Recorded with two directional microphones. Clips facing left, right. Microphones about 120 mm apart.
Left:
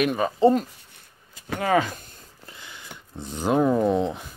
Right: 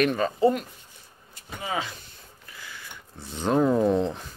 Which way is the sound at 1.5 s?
60° left (ahead or behind).